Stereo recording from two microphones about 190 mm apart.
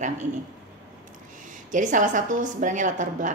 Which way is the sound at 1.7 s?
40° right (ahead or behind).